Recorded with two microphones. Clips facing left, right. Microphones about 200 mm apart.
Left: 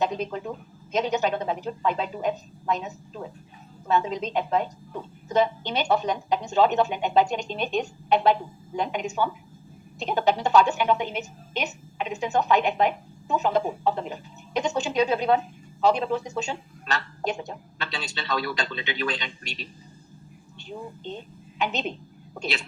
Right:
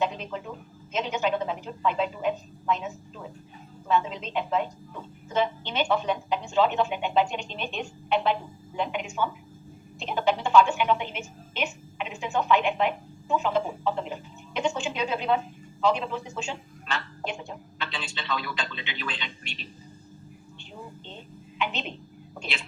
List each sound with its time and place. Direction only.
0.0 s a woman's voice: 40° left (ahead or behind)
21.6 s a woman's voice: 40° left (ahead or behind)